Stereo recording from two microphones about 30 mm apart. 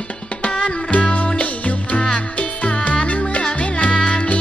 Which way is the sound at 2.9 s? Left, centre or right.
Left.